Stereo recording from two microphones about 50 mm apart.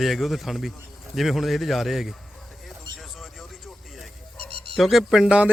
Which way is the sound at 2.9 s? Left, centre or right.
Centre.